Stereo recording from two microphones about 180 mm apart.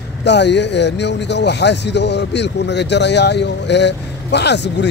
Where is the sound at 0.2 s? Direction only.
75° left (ahead or behind).